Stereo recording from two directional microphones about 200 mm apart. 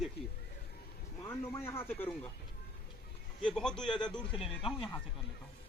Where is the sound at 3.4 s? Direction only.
5° left (ahead or behind).